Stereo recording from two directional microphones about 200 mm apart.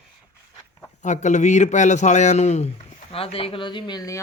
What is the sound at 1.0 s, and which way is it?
A man's voice, 35° left (ahead or behind).